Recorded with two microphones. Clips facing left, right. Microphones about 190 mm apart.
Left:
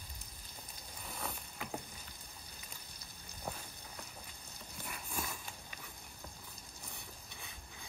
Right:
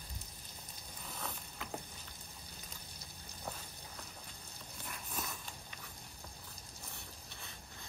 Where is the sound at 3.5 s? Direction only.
15° left (ahead or behind).